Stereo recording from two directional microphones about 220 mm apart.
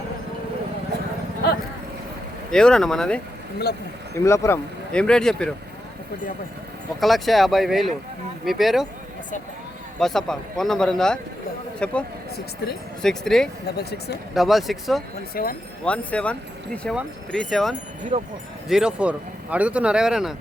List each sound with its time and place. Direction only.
2.5 s speech: 5° left (ahead or behind)
7.0 s speech: centre (ahead or behind)
10.0 s speech: centre (ahead or behind)
13.0 s speech: centre (ahead or behind)
15.4 s speech: 40° left (ahead or behind)
15.8 s speech: 5° left (ahead or behind)
18.1 s speech: 30° right (ahead or behind)
18.7 s speech: 5° right (ahead or behind)